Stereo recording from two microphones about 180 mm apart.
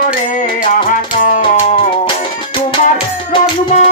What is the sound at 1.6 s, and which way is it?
Music, 30° left (ahead or behind).